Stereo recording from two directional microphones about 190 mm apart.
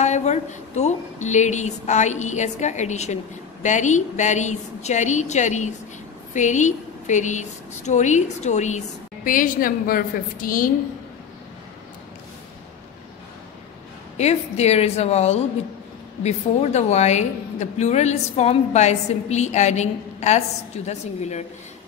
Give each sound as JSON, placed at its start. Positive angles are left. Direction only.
{"t": 0.0, "sound": "a woman's voice", "side_deg": 35}
{"t": 14.1, "sound": "a woman's voice", "side_deg": 35}